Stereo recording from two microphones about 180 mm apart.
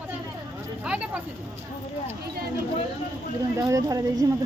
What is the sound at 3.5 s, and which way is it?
Speech, 20° right (ahead or behind).